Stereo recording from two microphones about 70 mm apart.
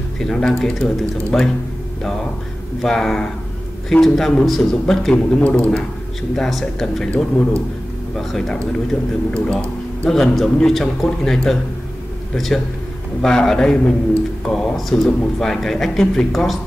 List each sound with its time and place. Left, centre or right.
0.2 s speech: centre
2.8 s a man's voice: centre
5.1 s a man's voice: centre
8.2 s a man's voice: centre
13.2 s a man's voice: centre